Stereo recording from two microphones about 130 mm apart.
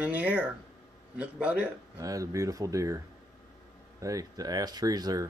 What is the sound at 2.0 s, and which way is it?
Speech, 25° right (ahead or behind).